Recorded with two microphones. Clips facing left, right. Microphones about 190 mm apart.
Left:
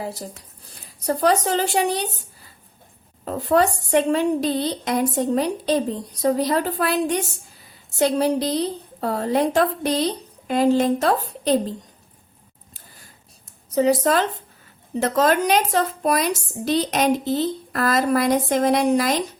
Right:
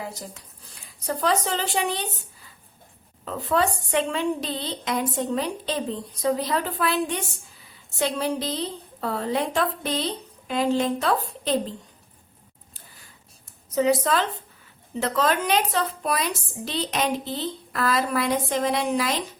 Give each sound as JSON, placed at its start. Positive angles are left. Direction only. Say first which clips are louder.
{"t": 0.0, "sound": "a woman's voice", "louder": "left 5 dB", "side_deg": 35}
{"t": 13.7, "sound": "a woman's voice", "louder": "left 3 dB", "side_deg": 40}